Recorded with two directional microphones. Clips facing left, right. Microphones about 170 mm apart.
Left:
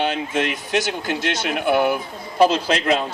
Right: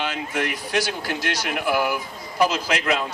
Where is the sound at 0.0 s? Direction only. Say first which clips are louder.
Left 4 dB; 25° left (ahead or behind).